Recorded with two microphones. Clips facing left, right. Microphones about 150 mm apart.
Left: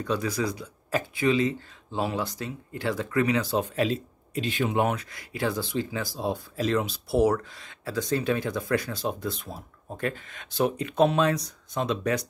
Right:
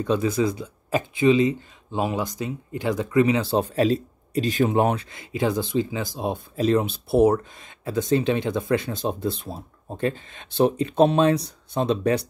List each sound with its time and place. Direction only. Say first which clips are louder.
0.0 s speech: right 6 dB; 25° right (ahead or behind)